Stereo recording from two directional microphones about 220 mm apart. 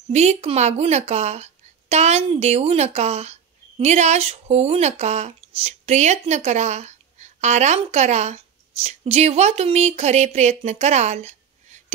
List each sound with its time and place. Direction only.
0.1 s speech: 30° right (ahead or behind)